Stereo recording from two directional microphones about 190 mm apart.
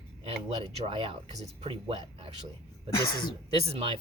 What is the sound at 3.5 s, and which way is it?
Speech, 30° right (ahead or behind).